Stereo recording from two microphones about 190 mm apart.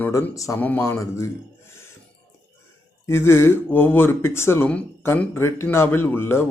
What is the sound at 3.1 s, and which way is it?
Speech, 15° left (ahead or behind).